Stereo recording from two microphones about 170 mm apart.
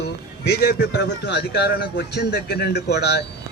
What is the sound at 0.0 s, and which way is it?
A man's voice, 80° left.